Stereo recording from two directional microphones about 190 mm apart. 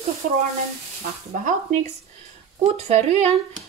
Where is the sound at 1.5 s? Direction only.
40° right (ahead or behind).